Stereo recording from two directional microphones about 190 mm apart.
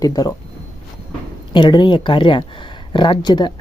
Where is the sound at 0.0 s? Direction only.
20° left (ahead or behind).